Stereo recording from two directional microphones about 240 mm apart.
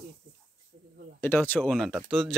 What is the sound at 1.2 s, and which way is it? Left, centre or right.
Speech, centre.